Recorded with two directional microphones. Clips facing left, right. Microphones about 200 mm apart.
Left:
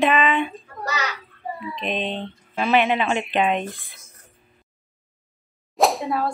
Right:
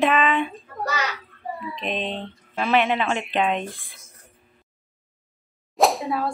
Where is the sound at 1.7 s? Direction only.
Centre (ahead or behind).